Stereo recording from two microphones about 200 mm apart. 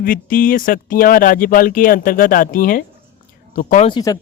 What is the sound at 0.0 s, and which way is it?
Speech, 45° left (ahead or behind).